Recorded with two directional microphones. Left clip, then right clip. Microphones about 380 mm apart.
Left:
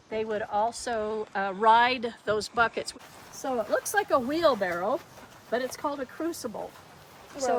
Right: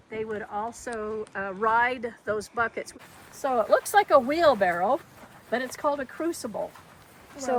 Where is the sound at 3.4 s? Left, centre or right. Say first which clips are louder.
Right 5 dB; centre.